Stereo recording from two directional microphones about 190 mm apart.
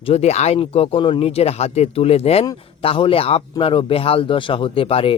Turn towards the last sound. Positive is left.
turn(degrees=30)  # may be behind; listen again after turning